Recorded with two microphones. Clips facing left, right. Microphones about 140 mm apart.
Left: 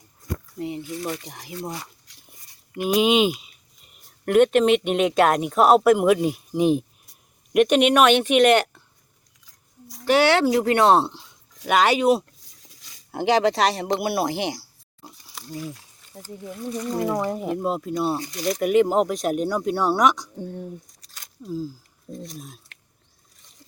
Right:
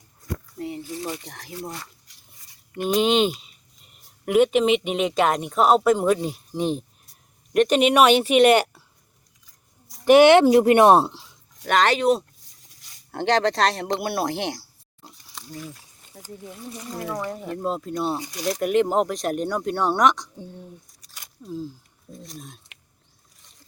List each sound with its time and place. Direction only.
0.8 s speech: 30° right (ahead or behind)
1.3 s speech: 10° left (ahead or behind); by 8.8 s 10° right (ahead or behind)
10.1 s speech: 20° right (ahead or behind)
11.6 s speech: 10° left (ahead or behind)
15.0 s pig: 5° left (ahead or behind)
16.9 s speech: 25° left (ahead or behind)
17.4 s speech: 10° left (ahead or behind)
18.2 s speech: 5° right (ahead or behind)
20.4 s speech: 55° left (ahead or behind)
21.4 s speech: 5° left (ahead or behind)